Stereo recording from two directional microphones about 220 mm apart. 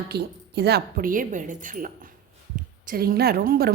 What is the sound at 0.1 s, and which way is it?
A woman's voice, 50° right (ahead or behind).